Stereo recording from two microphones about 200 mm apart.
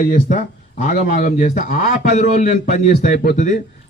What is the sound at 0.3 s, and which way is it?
A man's voice, 40° left (ahead or behind).